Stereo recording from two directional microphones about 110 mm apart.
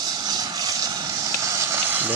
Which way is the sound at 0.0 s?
35° right (ahead or behind).